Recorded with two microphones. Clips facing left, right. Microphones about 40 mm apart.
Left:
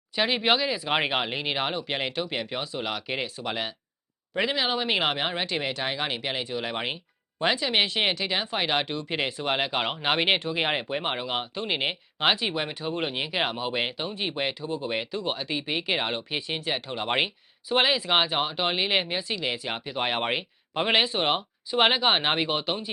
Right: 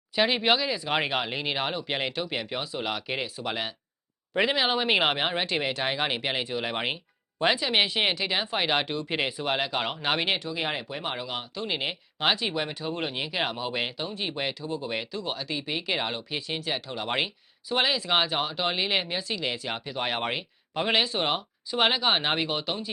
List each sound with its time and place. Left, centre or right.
0.2 s speech: centre
10.3 s speech: left